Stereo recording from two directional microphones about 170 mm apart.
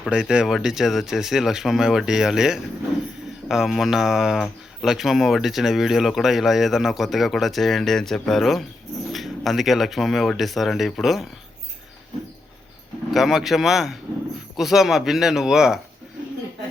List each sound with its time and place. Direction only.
0.0 s speech: 5° right (ahead or behind)
13.1 s speech: centre (ahead or behind)